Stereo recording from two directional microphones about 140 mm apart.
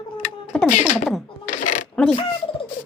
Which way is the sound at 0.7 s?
60° left (ahead or behind).